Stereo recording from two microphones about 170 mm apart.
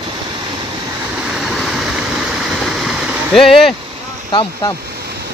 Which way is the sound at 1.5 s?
Centre (ahead or behind).